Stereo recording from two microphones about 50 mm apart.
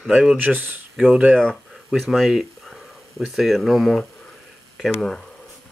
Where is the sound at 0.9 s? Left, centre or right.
Centre.